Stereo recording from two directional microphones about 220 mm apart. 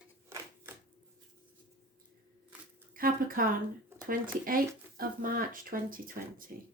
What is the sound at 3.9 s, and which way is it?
Speech, 40° right (ahead or behind).